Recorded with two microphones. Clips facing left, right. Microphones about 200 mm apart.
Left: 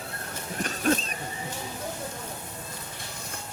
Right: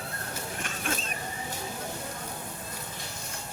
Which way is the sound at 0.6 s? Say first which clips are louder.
Left 11 dB; 35° left (ahead or behind).